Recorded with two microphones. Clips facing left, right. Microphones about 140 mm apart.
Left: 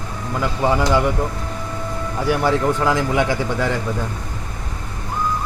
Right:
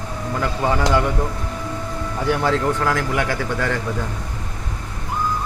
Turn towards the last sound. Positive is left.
turn(degrees=15)  # may be behind; listen again after turning